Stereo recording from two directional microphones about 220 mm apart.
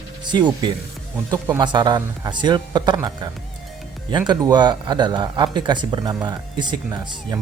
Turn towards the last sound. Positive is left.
turn(degrees=-20)  # may be behind; listen again after turning